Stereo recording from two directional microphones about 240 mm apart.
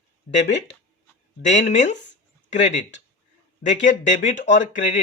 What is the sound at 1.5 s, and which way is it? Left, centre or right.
Speech, left.